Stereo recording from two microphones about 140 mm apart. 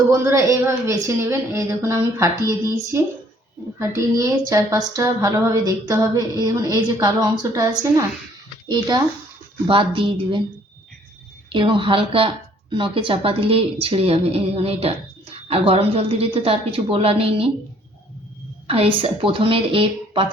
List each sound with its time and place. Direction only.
0.1 s a woman's voice: 20° right (ahead or behind); by 10.4 s 35° right (ahead or behind)
11.4 s a woman's voice: 35° right (ahead or behind)
18.7 s a woman's voice: 40° right (ahead or behind)